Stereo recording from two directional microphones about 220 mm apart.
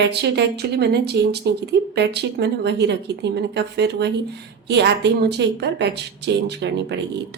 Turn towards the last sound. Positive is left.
turn(degrees=-50)  # may be behind; listen again after turning